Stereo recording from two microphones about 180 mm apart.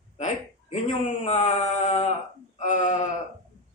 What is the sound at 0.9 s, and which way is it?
A man's voice, 35° left (ahead or behind).